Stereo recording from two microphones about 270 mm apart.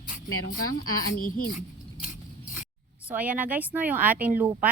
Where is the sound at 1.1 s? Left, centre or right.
Left.